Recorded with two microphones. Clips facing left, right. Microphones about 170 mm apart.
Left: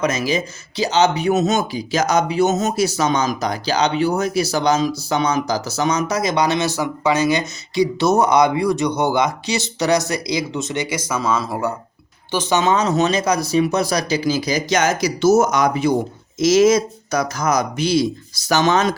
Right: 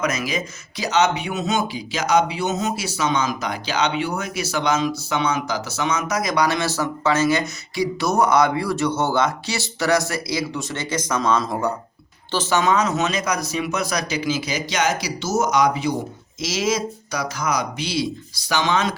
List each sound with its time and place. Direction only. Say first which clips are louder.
0.0 s speech: left 4 dB; 30° left (ahead or behind); by 11.7 s 5° left (ahead or behind)
12.3 s speech: left 2 dB; 15° left (ahead or behind); by 18.9 s 45° left (ahead or behind)